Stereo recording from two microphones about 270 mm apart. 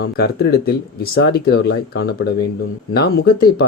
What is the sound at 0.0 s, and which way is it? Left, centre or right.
Speech, left.